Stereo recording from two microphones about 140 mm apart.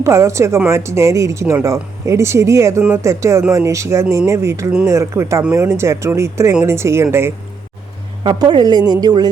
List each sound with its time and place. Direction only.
0.0 s speech: 20° right (ahead or behind)
8.2 s speech: 30° right (ahead or behind)